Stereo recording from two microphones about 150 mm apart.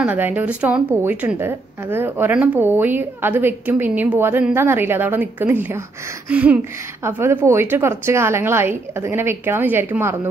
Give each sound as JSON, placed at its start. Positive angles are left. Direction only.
{"t": 0.0, "sound": "a woman's voice", "side_deg": -10}